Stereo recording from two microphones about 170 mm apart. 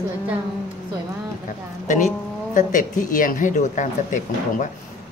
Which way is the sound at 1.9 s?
50° left (ahead or behind).